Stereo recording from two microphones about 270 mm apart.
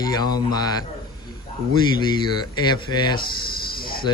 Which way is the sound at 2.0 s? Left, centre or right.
Centre.